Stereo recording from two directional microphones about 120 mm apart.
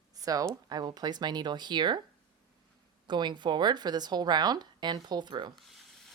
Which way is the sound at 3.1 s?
40° right (ahead or behind).